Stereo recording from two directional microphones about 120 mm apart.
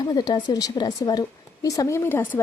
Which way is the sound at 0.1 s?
35° left (ahead or behind).